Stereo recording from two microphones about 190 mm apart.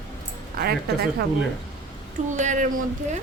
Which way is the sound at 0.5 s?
55° right (ahead or behind).